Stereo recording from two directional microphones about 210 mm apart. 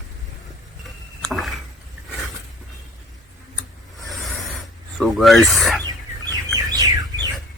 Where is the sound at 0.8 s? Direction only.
Centre (ahead or behind).